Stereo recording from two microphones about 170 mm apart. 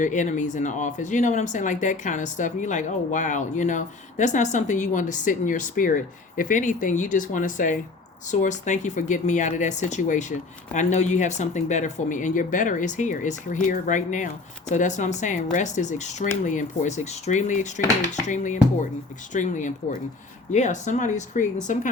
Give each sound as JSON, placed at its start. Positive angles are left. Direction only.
{"t": 0.0, "sound": "speech", "side_deg": 45}